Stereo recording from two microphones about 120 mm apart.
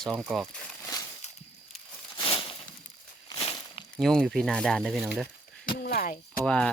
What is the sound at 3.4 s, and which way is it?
Walk, 45° left (ahead or behind).